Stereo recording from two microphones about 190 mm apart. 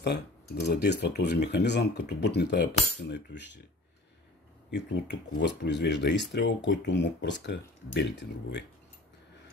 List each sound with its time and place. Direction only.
0.7 s speech: 60° left (ahead or behind)
4.6 s speech: 65° left (ahead or behind)